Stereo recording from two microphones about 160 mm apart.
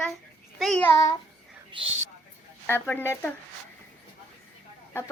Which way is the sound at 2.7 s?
10° left (ahead or behind).